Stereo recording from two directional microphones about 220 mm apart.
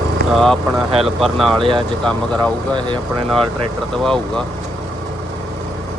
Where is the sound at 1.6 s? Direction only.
25° right (ahead or behind).